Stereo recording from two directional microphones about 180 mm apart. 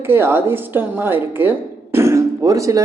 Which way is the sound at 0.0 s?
15° right (ahead or behind).